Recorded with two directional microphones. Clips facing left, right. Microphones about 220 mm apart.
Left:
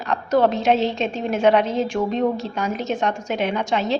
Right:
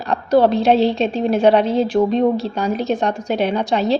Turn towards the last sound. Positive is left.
turn(degrees=-35)  # may be behind; listen again after turning